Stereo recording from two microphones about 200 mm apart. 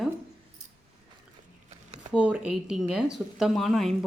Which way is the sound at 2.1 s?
5° right (ahead or behind).